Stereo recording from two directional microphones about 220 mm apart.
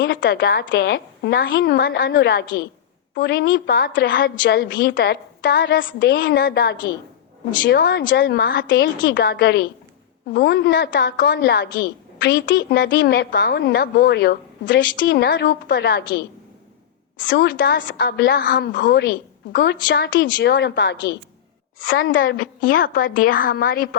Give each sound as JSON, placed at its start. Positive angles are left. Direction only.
{"t": 0.0, "sound": "a woman's voice", "side_deg": 40}
{"t": 17.2, "sound": "a woman's voice", "side_deg": 50}
{"t": 21.8, "sound": "a woman's voice", "side_deg": 40}